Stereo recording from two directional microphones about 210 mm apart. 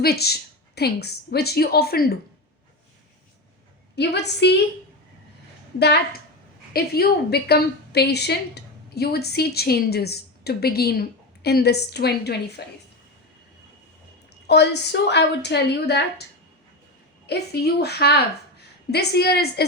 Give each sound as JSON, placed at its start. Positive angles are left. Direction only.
{"t": 0.0, "sound": "a woman's voice", "side_deg": 50}
{"t": 3.9, "sound": "a woman's voice", "side_deg": 55}
{"t": 6.7, "sound": "a woman's voice", "side_deg": 45}
{"t": 14.4, "sound": "a woman's voice", "side_deg": 55}
{"t": 17.2, "sound": "a woman's voice", "side_deg": 50}